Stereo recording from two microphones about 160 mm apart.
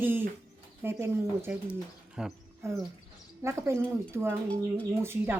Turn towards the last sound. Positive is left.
turn(degrees=-15)  # may be behind; listen again after turning